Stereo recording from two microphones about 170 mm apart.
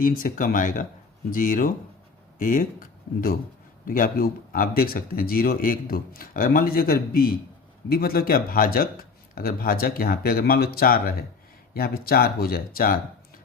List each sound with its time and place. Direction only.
0.0 s speech: 55° left (ahead or behind)
3.8 s speech: 55° left (ahead or behind)